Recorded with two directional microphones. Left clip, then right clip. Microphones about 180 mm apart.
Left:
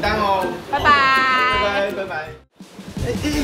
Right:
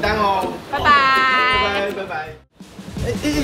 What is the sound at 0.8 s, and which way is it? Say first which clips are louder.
Speech: right 1 dB; centre (ahead or behind).